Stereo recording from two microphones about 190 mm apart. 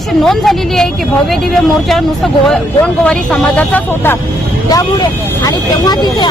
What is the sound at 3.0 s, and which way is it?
Speech, 5° left (ahead or behind).